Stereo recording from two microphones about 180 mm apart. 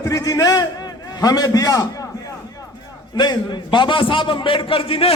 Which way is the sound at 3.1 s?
25° left (ahead or behind).